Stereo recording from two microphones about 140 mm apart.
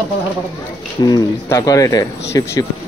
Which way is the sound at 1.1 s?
25° left (ahead or behind).